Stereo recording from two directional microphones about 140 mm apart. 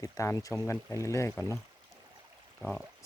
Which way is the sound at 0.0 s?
25° left (ahead or behind).